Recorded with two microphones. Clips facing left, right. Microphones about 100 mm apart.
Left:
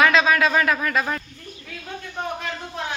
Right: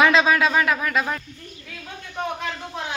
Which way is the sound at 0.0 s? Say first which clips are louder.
Even; 25° right (ahead or behind).